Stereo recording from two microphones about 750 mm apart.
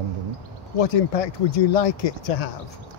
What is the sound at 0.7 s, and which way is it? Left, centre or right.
Speech, left.